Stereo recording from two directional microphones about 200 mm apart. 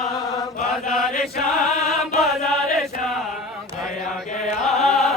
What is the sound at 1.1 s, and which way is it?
Chant, 35° left (ahead or behind).